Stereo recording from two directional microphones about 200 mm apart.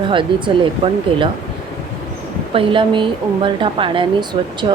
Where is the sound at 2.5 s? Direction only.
25° right (ahead or behind).